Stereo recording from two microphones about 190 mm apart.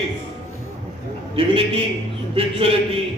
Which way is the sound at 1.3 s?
30° right (ahead or behind).